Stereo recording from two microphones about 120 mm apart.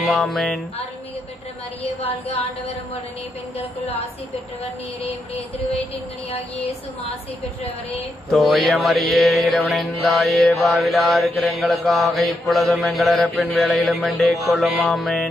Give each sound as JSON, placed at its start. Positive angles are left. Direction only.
{"t": 0.1, "sound": "mantra", "side_deg": 5}
{"t": 5.0, "sound": "music", "side_deg": 60}
{"t": 8.3, "sound": "mantra", "side_deg": 0}